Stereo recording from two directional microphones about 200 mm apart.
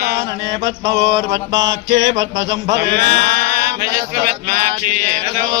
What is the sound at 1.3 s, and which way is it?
Mantra, 60° right (ahead or behind).